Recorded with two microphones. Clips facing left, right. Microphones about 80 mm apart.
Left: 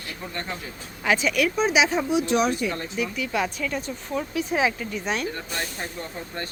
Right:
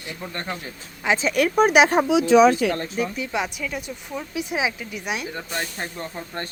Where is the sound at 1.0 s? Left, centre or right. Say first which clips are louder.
Right 1 dB; right.